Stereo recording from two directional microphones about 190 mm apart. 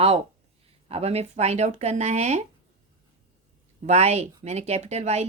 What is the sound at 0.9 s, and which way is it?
A woman's voice, 30° right (ahead or behind).